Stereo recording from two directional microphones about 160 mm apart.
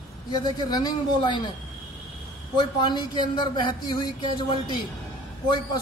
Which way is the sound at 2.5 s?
30° left (ahead or behind).